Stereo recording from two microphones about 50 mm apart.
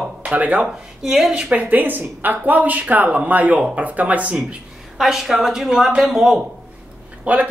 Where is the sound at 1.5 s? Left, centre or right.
Right.